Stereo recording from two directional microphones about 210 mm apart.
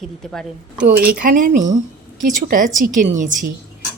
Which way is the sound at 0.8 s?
45° right (ahead or behind).